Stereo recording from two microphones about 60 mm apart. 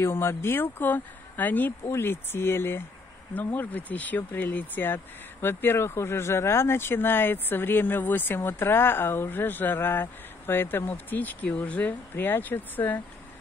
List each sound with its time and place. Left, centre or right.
0.0 s speech: left
1.9 s speech: left
3.5 s speech: left